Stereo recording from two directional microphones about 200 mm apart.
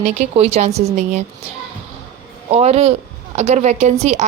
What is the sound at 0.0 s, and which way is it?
A woman's voice, 30° right (ahead or behind).